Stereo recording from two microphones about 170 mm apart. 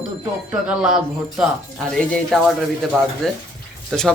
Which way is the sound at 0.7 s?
5° right (ahead or behind).